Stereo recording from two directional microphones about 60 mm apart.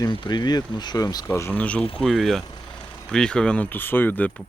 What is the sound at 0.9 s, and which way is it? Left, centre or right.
Speech, left.